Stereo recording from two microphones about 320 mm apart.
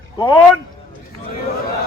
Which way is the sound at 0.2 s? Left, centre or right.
Centre.